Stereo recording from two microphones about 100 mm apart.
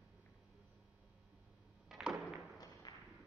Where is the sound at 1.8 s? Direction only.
10° right (ahead or behind).